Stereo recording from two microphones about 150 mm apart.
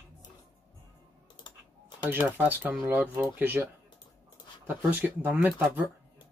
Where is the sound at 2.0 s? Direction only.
15° right (ahead or behind).